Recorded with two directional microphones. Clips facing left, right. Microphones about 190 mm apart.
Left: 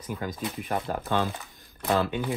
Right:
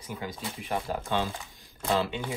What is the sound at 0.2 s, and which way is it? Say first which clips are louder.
Speech: left 4 dB; 55° left (ahead or behind).